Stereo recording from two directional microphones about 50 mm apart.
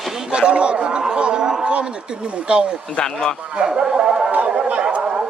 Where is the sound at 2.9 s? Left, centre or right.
Centre.